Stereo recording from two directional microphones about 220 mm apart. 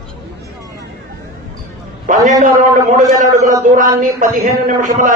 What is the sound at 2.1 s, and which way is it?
Speech, 35° right (ahead or behind).